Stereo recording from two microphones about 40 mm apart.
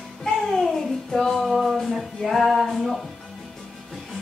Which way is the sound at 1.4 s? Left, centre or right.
Centre.